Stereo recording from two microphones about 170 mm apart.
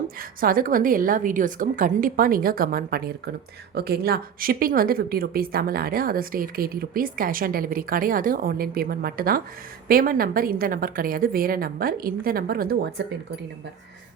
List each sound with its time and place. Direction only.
0.2 s a woman's voice: 55° right (ahead or behind)